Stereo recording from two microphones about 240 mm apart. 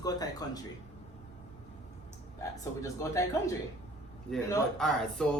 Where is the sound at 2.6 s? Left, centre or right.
Centre.